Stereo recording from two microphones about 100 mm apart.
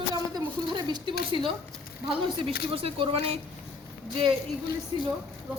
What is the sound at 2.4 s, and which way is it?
Speech, 70° right (ahead or behind).